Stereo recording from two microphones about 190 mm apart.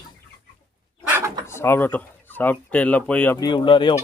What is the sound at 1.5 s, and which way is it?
Speech, 15° left (ahead or behind).